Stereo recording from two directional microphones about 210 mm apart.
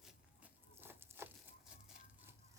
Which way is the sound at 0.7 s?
10° right (ahead or behind).